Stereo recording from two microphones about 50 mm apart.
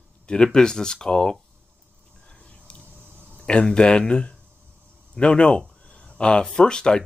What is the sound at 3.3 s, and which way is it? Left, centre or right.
Speech, left.